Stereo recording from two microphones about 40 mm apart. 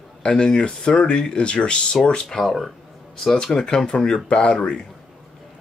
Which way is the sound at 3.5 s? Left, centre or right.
Centre.